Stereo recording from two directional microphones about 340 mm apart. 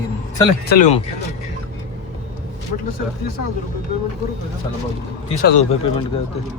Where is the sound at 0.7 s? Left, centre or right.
Centre.